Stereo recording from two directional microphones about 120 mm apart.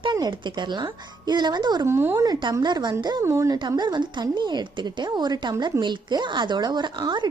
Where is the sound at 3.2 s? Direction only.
20° right (ahead or behind).